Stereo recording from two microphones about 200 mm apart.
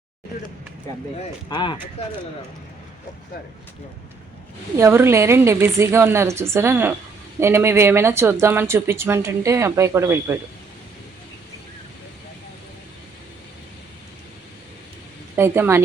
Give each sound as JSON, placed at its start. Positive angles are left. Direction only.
{"t": 1.5, "sound": "speech", "side_deg": 20}
{"t": 4.8, "sound": "speech", "side_deg": -10}
{"t": 15.4, "sound": "speech", "side_deg": -10}